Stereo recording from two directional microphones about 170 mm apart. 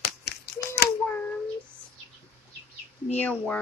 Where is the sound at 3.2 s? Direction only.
5° left (ahead or behind).